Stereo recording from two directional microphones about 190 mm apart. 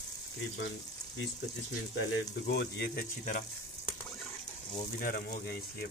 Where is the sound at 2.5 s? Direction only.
60° left (ahead or behind).